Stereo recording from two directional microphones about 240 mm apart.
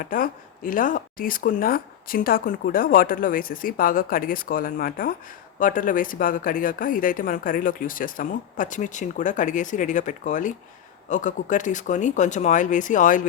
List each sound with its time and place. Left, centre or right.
0.0 s speech: left